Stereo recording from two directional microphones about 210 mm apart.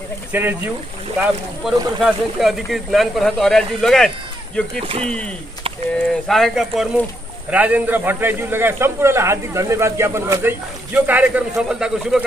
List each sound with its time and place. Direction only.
0.3 s a man's voice: 10° right (ahead or behind)
4.8 s speech: 30° right (ahead or behind)
6.2 s a man's voice: centre (ahead or behind)